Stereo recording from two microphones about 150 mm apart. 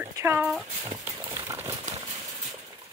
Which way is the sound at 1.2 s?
25° right (ahead or behind).